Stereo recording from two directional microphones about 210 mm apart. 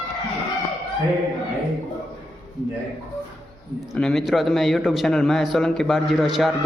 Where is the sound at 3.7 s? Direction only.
Centre (ahead or behind).